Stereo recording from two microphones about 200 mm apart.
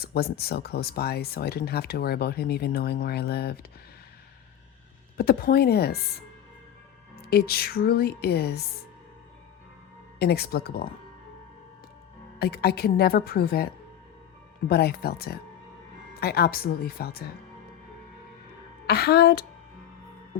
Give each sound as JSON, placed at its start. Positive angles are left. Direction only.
{"t": 0.0, "sound": "speech", "side_deg": 50}
{"t": 5.1, "sound": "speech", "side_deg": 50}
{"t": 7.2, "sound": "speech", "side_deg": 55}
{"t": 10.2, "sound": "speech", "side_deg": 50}
{"t": 12.4, "sound": "speech", "side_deg": 50}
{"t": 14.7, "sound": "speech", "side_deg": 50}
{"t": 18.9, "sound": "speech", "side_deg": 55}